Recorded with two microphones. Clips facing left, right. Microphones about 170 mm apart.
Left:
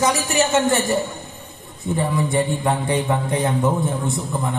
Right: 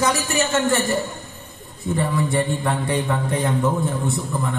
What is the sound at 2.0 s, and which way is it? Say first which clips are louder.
A man's voice: left 1 dB; 20° left (ahead or behind).